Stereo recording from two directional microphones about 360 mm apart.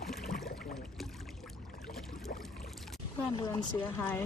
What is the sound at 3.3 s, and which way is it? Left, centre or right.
Speech, centre.